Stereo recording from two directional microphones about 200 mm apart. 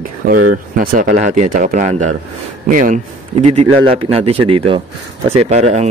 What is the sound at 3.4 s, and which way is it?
Speech, 30° right (ahead or behind).